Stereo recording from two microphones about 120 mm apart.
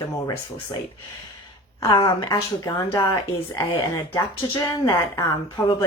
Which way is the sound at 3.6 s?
25° left (ahead or behind).